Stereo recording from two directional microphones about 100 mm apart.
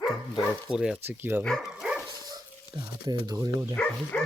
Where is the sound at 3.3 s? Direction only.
30° right (ahead or behind).